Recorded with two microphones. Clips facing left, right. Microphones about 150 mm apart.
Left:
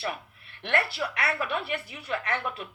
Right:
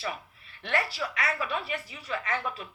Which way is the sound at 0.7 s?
65° left (ahead or behind).